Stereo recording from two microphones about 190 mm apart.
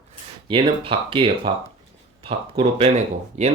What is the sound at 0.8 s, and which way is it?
Speech, 30° right (ahead or behind).